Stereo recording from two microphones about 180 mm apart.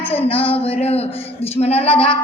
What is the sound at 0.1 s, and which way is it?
A woman's voice, 30° left (ahead or behind).